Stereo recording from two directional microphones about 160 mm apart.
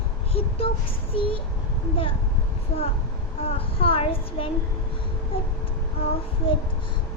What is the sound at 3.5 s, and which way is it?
Speech, 35° left (ahead or behind).